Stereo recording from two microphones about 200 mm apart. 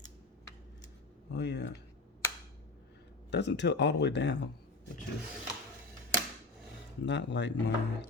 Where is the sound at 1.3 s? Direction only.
60° left (ahead or behind).